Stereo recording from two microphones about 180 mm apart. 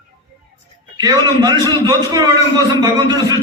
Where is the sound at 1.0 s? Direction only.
20° right (ahead or behind).